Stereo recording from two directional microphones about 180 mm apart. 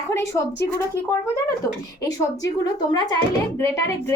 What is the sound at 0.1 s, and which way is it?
A woman's voice, 15° left (ahead or behind).